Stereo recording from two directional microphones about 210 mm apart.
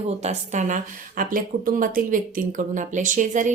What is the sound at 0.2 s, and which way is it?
Speech, 35° right (ahead or behind).